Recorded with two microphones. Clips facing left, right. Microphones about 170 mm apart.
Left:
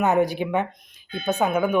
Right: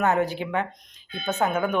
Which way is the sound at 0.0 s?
15° left (ahead or behind).